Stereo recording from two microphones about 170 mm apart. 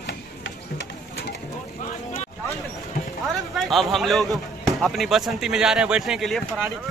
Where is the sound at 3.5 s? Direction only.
Centre (ahead or behind).